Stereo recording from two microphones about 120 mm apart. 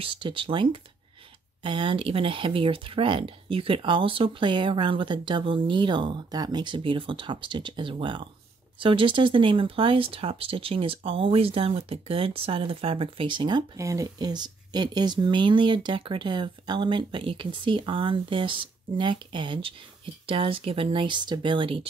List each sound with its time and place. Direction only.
0.0 s speech: 45° right (ahead or behind)
13.7 s speech: 25° right (ahead or behind); by 21.8 s 45° right (ahead or behind)